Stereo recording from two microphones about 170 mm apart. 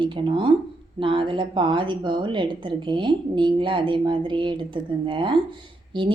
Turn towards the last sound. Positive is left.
turn(degrees=-30)  # may be behind; listen again after turning